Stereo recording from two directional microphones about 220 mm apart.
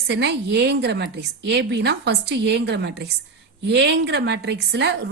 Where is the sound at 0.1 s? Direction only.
50° right (ahead or behind).